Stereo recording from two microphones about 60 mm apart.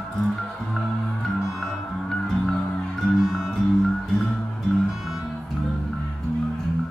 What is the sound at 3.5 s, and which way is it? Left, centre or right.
Music, centre.